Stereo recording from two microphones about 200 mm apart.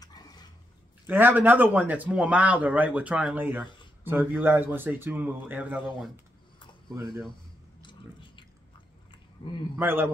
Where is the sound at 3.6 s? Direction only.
25° left (ahead or behind).